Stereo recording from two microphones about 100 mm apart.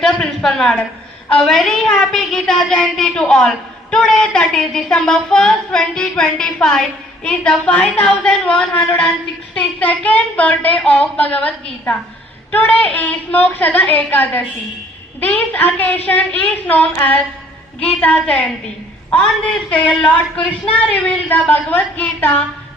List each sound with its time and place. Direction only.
0.0 s a woman's voice: 5° left (ahead or behind)